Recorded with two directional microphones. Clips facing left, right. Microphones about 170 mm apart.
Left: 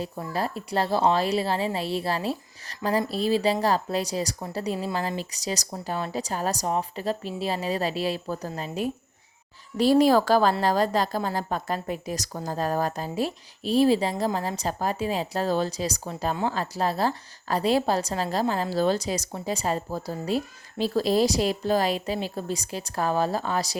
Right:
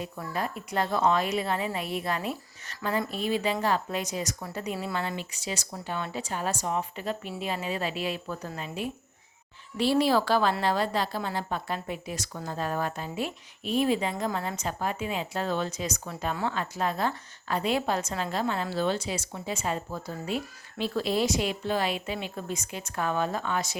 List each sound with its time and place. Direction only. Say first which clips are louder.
0.0 s a woman's voice: left 3 dB; 35° left (ahead or behind)